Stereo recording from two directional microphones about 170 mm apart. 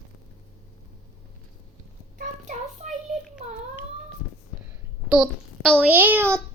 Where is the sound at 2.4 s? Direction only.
45° right (ahead or behind).